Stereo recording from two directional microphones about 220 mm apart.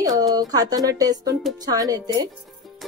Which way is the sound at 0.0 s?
15° right (ahead or behind).